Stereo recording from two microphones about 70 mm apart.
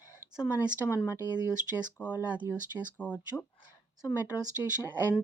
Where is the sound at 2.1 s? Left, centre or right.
Right.